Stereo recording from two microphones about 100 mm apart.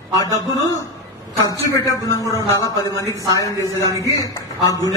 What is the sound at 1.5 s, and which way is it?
A man's voice, 35° left (ahead or behind).